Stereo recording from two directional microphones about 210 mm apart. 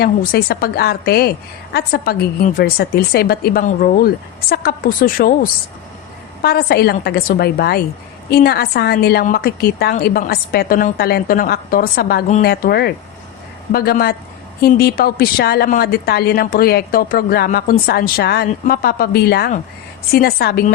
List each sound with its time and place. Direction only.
0.0 s a woman's voice: 45° left (ahead or behind)